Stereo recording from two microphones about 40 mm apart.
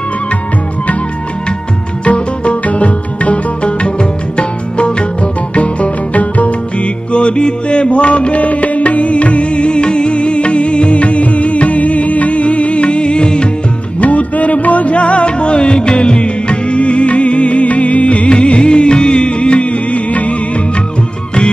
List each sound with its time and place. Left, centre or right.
2.0 s music: left
13.9 s music: left